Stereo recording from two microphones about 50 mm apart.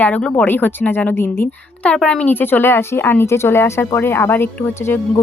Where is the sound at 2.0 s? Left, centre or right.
Left.